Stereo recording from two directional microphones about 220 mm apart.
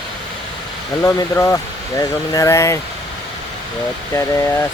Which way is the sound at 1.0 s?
15° left (ahead or behind).